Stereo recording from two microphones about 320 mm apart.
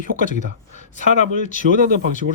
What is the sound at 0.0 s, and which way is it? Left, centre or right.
Speech, left.